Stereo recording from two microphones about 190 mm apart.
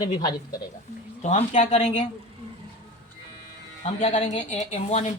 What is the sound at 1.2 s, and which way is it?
Speech, 35° left (ahead or behind).